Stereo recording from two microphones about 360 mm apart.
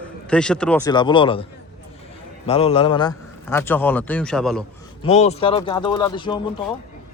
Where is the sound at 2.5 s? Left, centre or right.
Centre.